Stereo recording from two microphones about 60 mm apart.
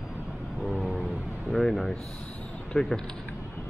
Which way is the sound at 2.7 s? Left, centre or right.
Centre.